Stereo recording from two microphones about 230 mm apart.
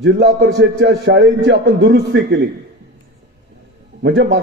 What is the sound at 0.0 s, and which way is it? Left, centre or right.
A man's voice, right.